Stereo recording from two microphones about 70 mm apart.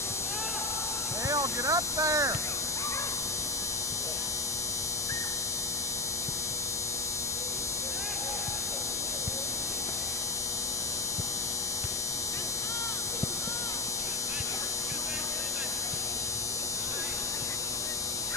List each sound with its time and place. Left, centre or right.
1.3 s speech: right